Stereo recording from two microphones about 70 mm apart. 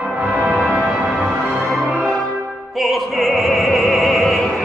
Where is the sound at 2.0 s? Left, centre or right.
Centre.